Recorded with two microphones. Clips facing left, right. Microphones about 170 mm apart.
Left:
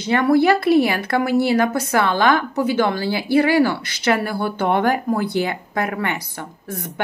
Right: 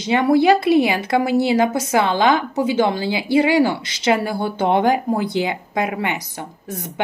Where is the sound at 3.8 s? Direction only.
55° left (ahead or behind).